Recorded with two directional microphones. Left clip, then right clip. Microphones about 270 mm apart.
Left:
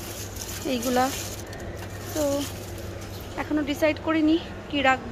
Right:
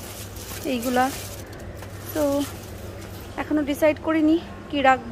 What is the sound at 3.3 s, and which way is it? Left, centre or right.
Speech, centre.